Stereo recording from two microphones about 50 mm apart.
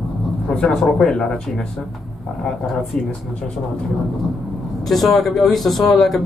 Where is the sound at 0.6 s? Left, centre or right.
Left.